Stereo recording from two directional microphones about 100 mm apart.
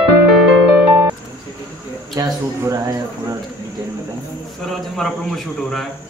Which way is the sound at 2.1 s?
35° right (ahead or behind).